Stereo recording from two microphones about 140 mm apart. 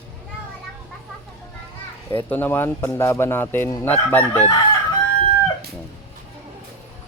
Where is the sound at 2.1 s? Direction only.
15° left (ahead or behind).